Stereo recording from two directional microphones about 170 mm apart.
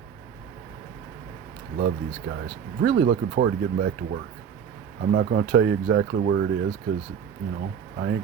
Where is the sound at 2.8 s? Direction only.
80° right.